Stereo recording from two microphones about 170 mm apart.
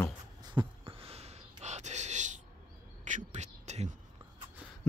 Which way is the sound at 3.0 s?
45° right (ahead or behind).